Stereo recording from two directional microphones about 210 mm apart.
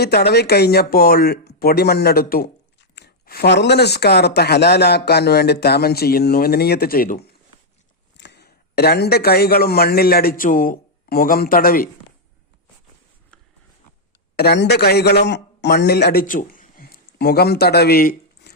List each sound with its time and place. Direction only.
0.0 s speech: 50° left (ahead or behind)
8.1 s speech: 55° left (ahead or behind)
14.3 s a man's voice: 50° left (ahead or behind)